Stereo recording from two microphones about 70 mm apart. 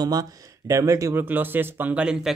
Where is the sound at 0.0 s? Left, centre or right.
Right.